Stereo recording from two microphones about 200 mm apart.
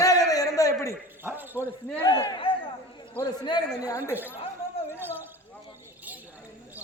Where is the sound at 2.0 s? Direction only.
20° left (ahead or behind).